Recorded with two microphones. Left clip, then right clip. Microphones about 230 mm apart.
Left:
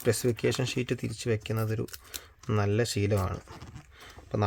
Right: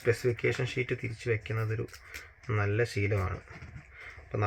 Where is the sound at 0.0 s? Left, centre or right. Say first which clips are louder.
Left 1 dB; left.